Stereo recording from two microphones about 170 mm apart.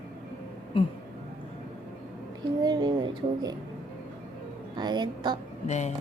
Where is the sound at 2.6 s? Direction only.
25° right (ahead or behind).